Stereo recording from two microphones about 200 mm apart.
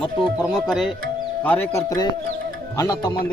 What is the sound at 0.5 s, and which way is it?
Speech, centre (ahead or behind).